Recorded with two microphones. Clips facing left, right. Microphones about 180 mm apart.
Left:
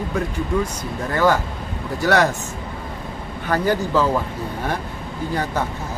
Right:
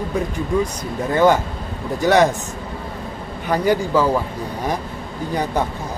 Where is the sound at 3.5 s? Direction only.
10° right (ahead or behind).